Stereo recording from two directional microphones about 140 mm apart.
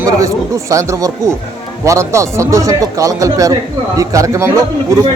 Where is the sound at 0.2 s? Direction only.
25° right (ahead or behind).